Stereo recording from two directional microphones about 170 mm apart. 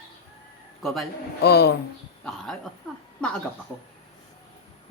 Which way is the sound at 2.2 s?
Centre (ahead or behind).